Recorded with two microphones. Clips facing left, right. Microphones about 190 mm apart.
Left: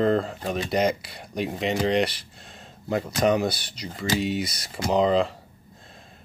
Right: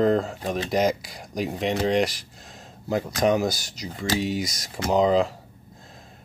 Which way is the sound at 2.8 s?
Centre (ahead or behind).